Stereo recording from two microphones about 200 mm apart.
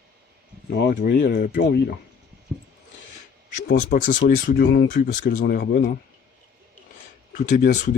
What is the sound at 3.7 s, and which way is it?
Speech, 45° left (ahead or behind).